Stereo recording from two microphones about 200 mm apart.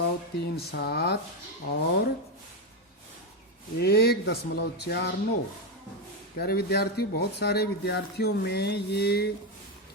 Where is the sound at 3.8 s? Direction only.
50° left (ahead or behind).